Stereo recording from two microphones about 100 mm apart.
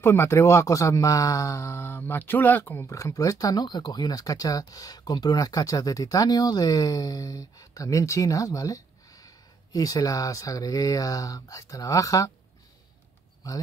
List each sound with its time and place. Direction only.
0.0 s speech: 25° left (ahead or behind)
13.4 s speech: 35° left (ahead or behind)